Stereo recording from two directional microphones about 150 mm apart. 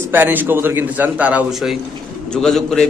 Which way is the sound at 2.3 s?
5° left (ahead or behind).